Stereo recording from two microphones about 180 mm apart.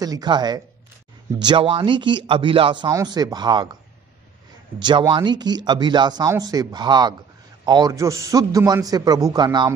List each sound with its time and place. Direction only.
0.0 s a man's voice: 20° right (ahead or behind)
4.8 s a man's voice: 25° right (ahead or behind)